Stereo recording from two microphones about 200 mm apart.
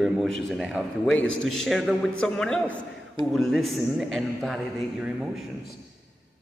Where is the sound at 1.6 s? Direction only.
Centre (ahead or behind).